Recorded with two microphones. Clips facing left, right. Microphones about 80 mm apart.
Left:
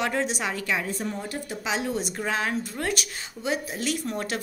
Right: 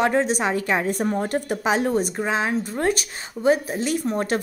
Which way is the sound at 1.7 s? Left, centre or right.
Right.